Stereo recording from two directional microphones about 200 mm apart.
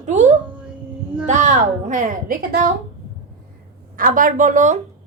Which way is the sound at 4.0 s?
40° right (ahead or behind).